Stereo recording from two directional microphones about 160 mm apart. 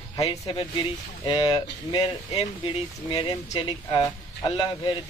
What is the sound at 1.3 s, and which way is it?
Speech, 30° left (ahead or behind).